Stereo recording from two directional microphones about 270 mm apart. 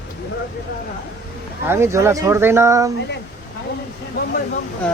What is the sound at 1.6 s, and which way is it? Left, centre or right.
Speech, centre.